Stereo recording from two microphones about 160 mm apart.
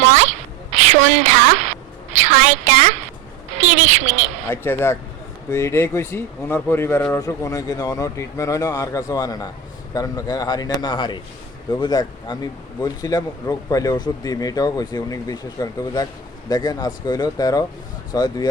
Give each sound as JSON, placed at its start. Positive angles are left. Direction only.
{"t": 0.7, "sound": "a sound", "side_deg": -45}
{"t": 2.1, "sound": "a woman's voice", "side_deg": -45}
{"t": 4.5, "sound": "a man's voice", "side_deg": 15}